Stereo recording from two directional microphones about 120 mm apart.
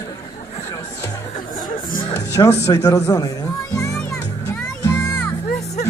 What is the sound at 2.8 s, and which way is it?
Music, 30° left (ahead or behind).